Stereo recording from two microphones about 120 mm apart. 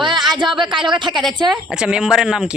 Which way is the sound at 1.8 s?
5° right (ahead or behind).